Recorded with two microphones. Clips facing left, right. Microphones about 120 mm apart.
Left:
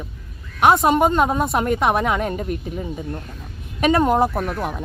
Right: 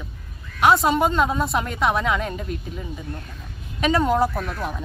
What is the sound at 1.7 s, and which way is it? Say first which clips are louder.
Speech: even; 50° left (ahead or behind).